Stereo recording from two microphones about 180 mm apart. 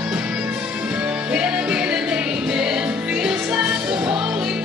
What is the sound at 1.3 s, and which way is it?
Music, 5° right (ahead or behind).